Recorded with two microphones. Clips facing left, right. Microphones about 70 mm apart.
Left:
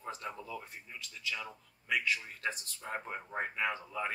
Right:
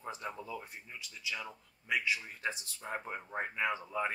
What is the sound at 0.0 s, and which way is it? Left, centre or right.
Speech, centre.